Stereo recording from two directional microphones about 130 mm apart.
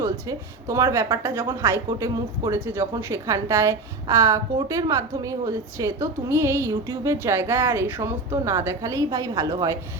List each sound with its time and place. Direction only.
0.0 s a woman's voice: 25° right (ahead or behind)